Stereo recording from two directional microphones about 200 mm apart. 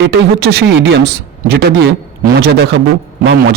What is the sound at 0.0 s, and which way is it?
Speech, 55° right (ahead or behind).